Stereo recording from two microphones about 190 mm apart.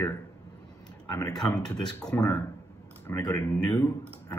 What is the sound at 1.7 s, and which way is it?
A man's voice, 20° left (ahead or behind).